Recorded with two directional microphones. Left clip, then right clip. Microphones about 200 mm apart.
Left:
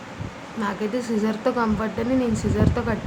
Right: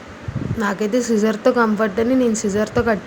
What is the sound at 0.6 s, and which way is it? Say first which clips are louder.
Speech: right 6 dB; 30° right (ahead or behind).